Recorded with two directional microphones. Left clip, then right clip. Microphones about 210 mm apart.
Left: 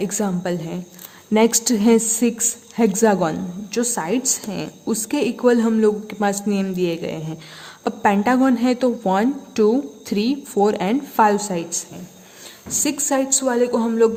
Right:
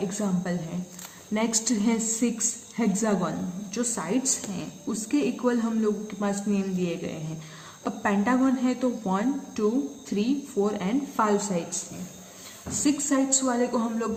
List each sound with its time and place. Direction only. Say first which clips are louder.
0.1 s a woman's voice: left 7 dB; 55° left (ahead or behind)
12.8 s a woman's voice: left 4 dB; 55° left (ahead or behind)